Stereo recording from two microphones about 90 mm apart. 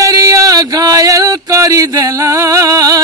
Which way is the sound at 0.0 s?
40° right (ahead or behind).